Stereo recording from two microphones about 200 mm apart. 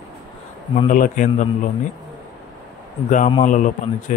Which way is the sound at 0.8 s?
40° left (ahead or behind).